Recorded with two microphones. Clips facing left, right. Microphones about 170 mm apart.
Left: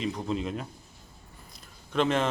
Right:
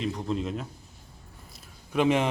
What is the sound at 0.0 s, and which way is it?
Speech, centre (ahead or behind).